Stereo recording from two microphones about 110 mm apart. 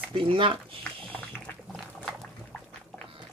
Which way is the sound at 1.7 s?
5° left (ahead or behind).